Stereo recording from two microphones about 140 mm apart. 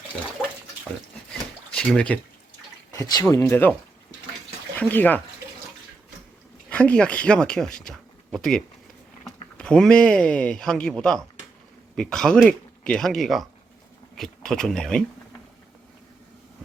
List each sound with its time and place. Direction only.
0.9 s a sound: 5° left (ahead or behind)
2.9 s speech: 25° left (ahead or behind)
4.8 s speech: 10° left (ahead or behind)
6.7 s speech: 10° left (ahead or behind)